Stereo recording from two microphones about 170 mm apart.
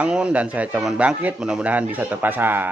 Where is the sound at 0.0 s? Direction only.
5° right (ahead or behind).